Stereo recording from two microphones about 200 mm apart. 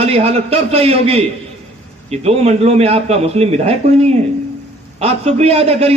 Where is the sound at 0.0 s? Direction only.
30° right (ahead or behind).